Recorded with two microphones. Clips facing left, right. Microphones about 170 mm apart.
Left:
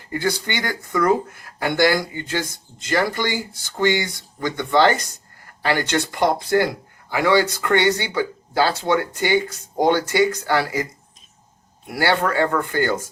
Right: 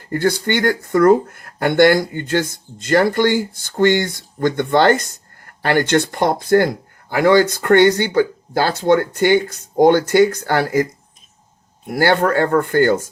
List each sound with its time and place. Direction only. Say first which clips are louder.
0.1 s speech: right 6 dB; 50° right (ahead or behind)
11.9 s speech: right 5 dB; 45° right (ahead or behind)